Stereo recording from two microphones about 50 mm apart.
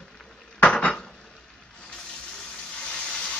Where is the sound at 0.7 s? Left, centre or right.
Centre.